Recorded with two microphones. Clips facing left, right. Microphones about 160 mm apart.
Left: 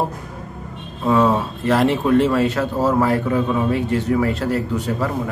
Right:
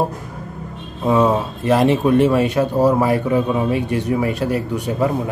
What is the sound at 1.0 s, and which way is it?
Speech, 15° right (ahead or behind).